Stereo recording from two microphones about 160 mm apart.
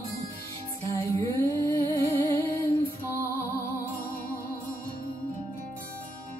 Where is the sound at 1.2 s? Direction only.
15° left (ahead or behind).